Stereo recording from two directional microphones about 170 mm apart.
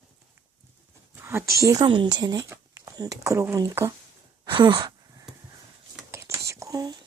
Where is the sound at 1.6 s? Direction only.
20° right (ahead or behind).